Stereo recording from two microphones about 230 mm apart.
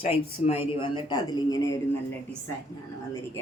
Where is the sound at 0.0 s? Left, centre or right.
Left.